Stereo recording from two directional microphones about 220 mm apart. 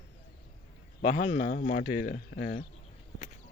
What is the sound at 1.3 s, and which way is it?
Speech, 35° left (ahead or behind).